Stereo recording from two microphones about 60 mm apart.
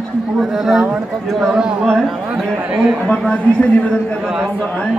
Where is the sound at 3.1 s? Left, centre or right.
Left.